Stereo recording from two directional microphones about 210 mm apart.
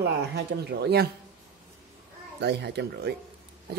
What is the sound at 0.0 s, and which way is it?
Speech, 50° right (ahead or behind).